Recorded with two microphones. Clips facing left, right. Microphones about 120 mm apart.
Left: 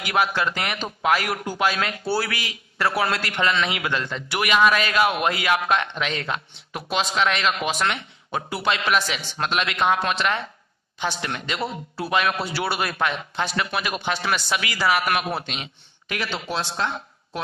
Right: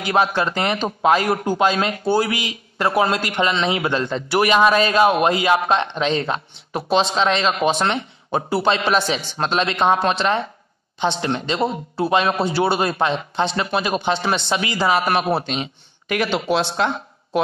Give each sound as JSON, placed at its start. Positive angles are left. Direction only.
{"t": 0.0, "sound": "speech", "side_deg": -25}
{"t": 16.3, "sound": "speech", "side_deg": -20}